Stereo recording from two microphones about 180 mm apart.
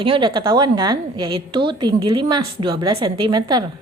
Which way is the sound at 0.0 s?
30° right (ahead or behind).